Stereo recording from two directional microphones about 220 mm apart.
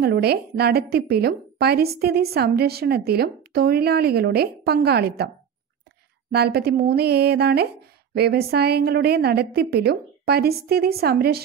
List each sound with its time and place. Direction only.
0.0 s a woman's voice: 45° right (ahead or behind)
6.3 s a woman's voice: 45° right (ahead or behind)